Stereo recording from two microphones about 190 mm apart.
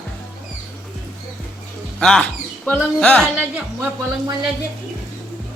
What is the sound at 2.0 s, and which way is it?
Speech, 5° left (ahead or behind).